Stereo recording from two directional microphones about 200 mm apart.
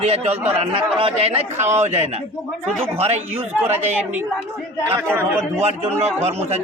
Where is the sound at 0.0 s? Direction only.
30° right (ahead or behind).